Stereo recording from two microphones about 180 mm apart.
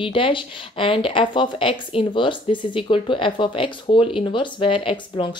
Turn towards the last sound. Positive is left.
turn(degrees=30)  # may be behind; listen again after turning